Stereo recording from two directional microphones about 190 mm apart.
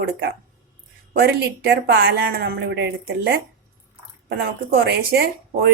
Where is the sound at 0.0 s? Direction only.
55° right (ahead or behind).